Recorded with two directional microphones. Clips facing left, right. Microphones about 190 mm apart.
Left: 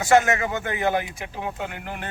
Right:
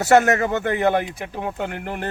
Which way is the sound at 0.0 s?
40° right (ahead or behind).